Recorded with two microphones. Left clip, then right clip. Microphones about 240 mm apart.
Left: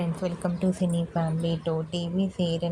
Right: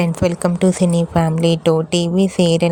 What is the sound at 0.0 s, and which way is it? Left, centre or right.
Speech, right.